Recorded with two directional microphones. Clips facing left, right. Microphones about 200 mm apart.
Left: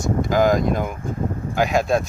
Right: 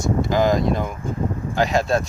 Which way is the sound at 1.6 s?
Centre (ahead or behind).